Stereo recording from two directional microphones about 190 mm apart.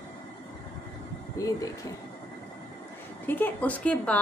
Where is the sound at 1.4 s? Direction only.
15° left (ahead or behind).